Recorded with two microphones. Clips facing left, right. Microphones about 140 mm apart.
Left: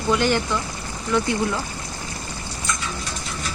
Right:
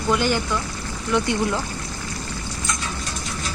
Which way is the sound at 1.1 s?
10° right (ahead or behind).